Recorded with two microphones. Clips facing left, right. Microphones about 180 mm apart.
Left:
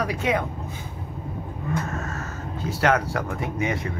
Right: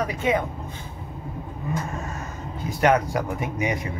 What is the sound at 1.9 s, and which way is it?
Speech, 15° right (ahead or behind).